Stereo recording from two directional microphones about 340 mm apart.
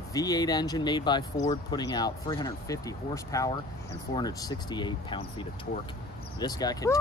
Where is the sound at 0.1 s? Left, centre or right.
Centre.